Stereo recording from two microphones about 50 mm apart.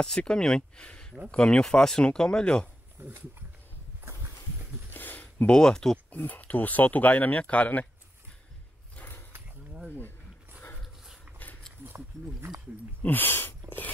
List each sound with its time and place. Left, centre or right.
0.0 s speech: centre
3.0 s speech: right
4.9 s a sound: left
5.5 s speech: centre
6.1 s speech: left
13.0 s speech: left